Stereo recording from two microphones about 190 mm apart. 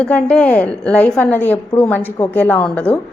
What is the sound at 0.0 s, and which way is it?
A woman's voice, 5° left (ahead or behind).